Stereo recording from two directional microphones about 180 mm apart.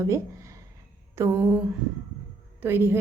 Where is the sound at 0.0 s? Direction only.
15° right (ahead or behind).